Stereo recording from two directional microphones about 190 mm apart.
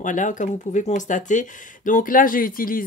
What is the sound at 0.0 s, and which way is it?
Speech, 40° left (ahead or behind).